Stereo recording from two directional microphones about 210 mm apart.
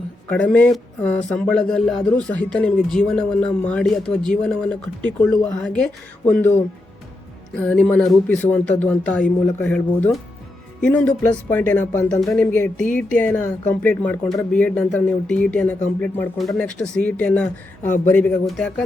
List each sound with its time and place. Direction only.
0.3 s speech: 5° left (ahead or behind)
7.5 s speech: 5° left (ahead or behind)